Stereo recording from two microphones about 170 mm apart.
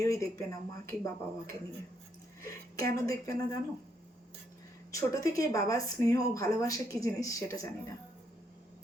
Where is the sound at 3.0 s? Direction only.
20° left (ahead or behind).